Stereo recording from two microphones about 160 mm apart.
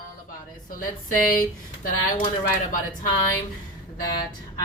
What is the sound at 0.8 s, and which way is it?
A woman's voice, 60° left (ahead or behind).